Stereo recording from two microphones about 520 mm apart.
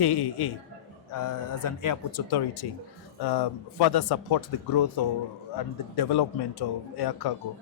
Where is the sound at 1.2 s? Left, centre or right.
Left.